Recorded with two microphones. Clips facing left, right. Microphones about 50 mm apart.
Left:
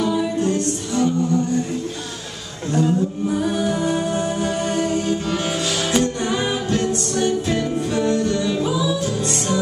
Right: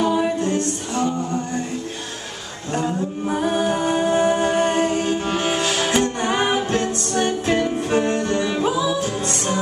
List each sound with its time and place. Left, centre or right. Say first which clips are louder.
0.0 s music: right 1 dB; right
2.7 s a capella: left 4 dB; right
7.9 s music: even; right